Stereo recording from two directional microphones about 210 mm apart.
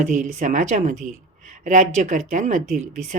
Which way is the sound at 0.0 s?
35° right (ahead or behind).